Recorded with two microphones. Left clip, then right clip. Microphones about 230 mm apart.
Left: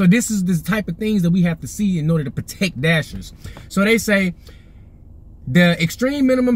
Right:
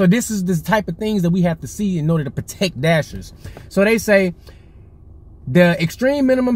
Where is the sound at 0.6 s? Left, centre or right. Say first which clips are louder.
Right 6 dB; centre.